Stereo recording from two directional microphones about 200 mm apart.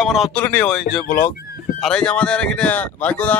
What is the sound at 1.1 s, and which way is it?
Speech, 10° left (ahead or behind).